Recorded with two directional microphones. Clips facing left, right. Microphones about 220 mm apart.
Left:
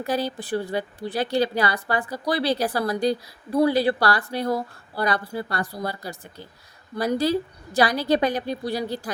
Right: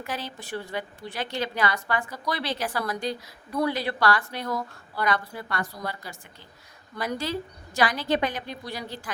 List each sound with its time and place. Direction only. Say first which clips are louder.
0.0 s a woman's voice: left 9 dB; 35° left (ahead or behind)